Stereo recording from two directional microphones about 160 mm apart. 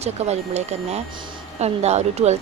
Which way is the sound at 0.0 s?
45° right (ahead or behind).